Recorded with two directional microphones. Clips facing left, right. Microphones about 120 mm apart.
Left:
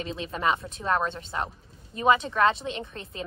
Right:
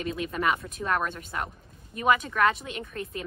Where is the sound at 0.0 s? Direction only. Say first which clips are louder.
Even; 25° left (ahead or behind).